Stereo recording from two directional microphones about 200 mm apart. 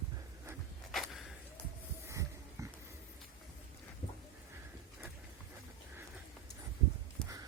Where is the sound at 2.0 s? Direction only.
15° right (ahead or behind).